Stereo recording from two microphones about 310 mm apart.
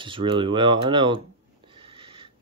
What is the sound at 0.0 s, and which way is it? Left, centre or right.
Speech, centre.